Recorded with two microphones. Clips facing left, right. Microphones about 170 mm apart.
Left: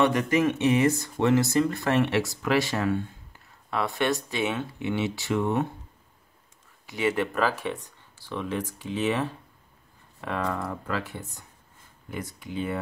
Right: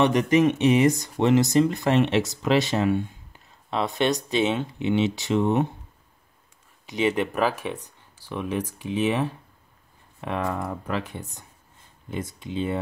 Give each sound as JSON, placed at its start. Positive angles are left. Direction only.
{"t": 0.0, "sound": "speech", "side_deg": -20}
{"t": 6.9, "sound": "speech", "side_deg": -20}